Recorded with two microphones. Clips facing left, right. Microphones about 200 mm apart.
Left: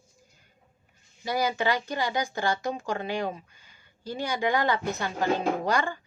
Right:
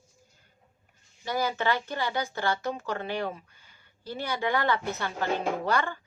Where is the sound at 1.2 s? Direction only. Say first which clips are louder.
Left 2 dB; 10° left (ahead or behind).